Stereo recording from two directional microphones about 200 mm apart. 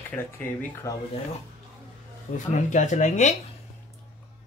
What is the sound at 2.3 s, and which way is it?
Speech, 35° left (ahead or behind).